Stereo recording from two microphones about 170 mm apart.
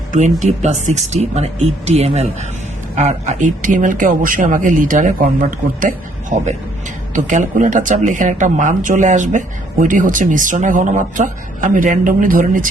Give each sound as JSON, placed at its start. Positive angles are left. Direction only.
{"t": 0.1, "sound": "speech", "side_deg": -45}
{"t": 7.1, "sound": "speech", "side_deg": -50}